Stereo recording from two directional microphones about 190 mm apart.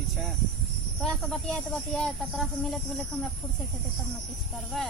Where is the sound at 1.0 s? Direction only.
5° left (ahead or behind).